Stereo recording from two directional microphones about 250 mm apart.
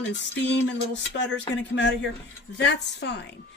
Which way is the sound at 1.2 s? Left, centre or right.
Left.